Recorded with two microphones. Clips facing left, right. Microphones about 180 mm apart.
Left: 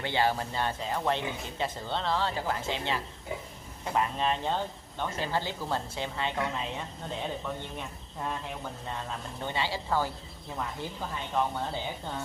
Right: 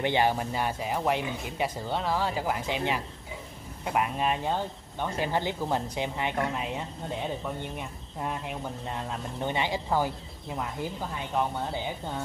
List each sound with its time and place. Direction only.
0.0 s speech: 20° right (ahead or behind)
8.9 s speech: 15° right (ahead or behind)